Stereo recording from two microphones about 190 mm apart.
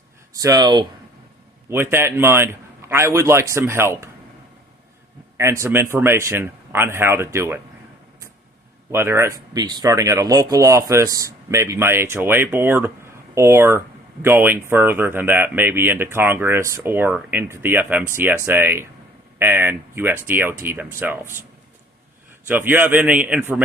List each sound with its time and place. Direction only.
0.3 s speech: 20° right (ahead or behind)
1.7 s speech: 10° right (ahead or behind)
5.4 s speech: 15° right (ahead or behind)
8.9 s speech: 15° right (ahead or behind)
22.4 s speech: 10° right (ahead or behind)